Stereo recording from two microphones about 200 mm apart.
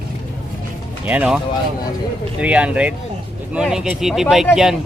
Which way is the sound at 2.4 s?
5° right (ahead or behind).